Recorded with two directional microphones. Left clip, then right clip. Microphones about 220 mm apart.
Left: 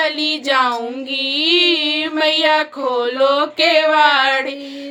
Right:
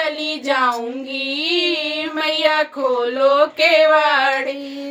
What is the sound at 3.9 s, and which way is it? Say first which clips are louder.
Child singing: left 2 dB; 45° left (ahead or behind).